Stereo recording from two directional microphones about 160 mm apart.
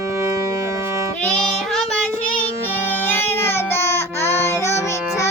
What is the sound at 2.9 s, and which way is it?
Child singing, 10° left (ahead or behind).